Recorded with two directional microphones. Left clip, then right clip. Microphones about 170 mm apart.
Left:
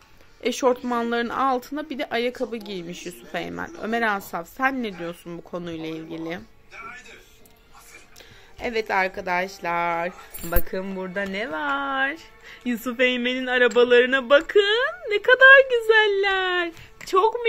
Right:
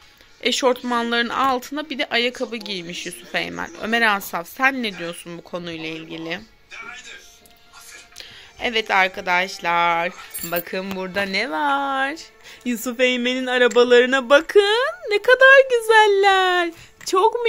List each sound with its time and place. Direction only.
0.4 s speech: 5° left (ahead or behind)
8.5 s speech: 5° right (ahead or behind); by 17.5 s 25° right (ahead or behind)